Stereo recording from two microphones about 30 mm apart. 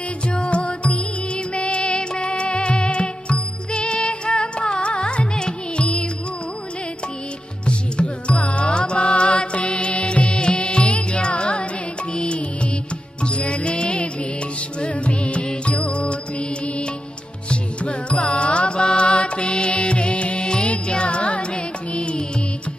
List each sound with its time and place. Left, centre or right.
0.3 s music: left
7.6 s music: left